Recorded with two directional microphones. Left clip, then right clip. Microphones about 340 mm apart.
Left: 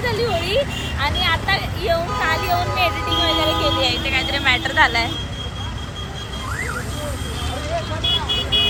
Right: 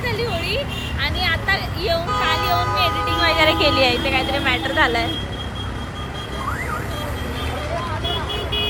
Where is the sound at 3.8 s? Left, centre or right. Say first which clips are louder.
Right 2 dB; centre.